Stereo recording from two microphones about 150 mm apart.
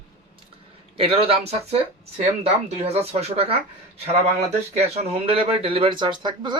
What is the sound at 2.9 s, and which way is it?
Speech, 45° right (ahead or behind).